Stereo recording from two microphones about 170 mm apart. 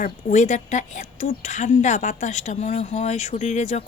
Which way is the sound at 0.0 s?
50° left (ahead or behind).